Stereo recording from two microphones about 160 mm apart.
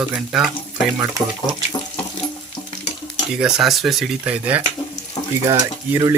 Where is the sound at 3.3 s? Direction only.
5° right (ahead or behind).